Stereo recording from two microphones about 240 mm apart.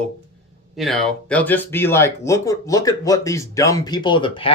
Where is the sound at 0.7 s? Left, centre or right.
Centre.